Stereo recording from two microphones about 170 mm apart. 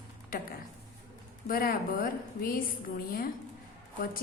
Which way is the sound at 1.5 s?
55° left (ahead or behind).